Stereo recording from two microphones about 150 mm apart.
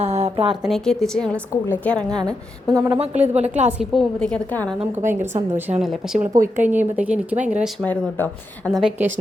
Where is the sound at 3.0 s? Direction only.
45° right (ahead or behind).